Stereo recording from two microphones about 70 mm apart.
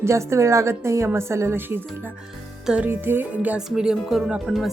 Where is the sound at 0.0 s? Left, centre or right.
Right.